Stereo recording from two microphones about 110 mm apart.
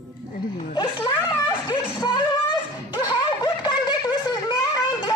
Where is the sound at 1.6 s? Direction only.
40° left (ahead or behind).